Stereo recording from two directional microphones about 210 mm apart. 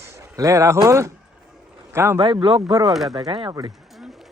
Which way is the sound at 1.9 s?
10° right (ahead or behind).